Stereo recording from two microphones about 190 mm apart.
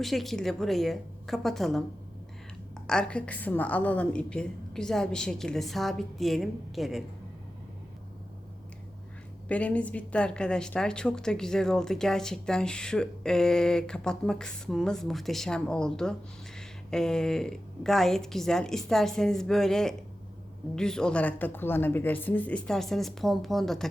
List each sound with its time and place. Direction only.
0.0 s a woman's voice: centre (ahead or behind)
2.8 s a woman's voice: 5° left (ahead or behind)
9.5 s a woman's voice: 5° left (ahead or behind)